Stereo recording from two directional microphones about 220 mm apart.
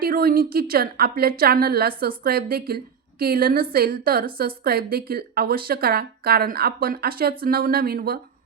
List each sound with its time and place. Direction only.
0.0 s speech: 40° right (ahead or behind)